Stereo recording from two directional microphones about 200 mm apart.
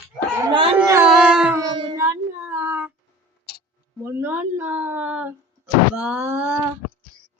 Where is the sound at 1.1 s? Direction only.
5° right (ahead or behind).